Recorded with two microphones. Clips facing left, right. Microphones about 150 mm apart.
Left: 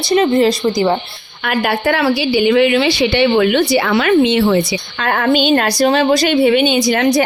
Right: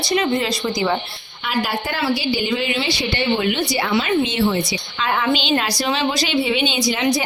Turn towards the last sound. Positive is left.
turn(degrees=55)  # may be behind; listen again after turning